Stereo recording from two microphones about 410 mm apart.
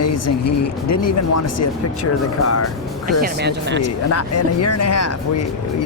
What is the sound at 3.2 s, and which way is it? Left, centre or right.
Speech, right.